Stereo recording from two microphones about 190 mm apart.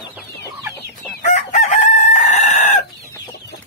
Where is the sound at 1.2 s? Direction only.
40° left (ahead or behind).